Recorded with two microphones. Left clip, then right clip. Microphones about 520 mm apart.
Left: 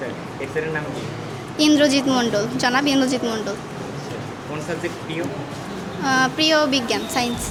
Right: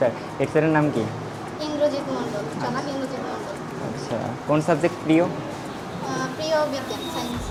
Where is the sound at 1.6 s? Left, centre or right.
Left.